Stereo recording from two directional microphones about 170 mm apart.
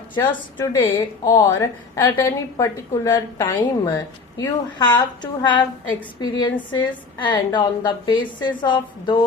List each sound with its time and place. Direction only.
0.2 s a woman's voice: 20° left (ahead or behind)